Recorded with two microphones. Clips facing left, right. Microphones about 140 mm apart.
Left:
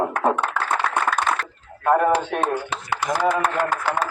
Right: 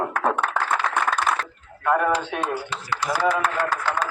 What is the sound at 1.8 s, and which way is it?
Didgeridoo, 25° left (ahead or behind).